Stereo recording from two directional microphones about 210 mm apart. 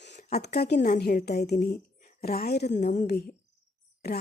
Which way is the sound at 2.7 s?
35° left (ahead or behind).